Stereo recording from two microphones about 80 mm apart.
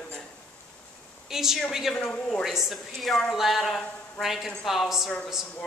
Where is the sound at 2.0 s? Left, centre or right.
Centre.